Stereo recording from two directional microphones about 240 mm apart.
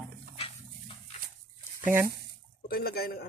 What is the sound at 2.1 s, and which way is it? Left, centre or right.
Water, left.